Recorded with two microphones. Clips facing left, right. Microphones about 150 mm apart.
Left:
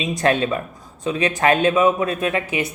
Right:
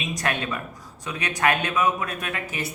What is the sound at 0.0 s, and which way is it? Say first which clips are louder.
Speech: left 8 dB; 25° left (ahead or behind).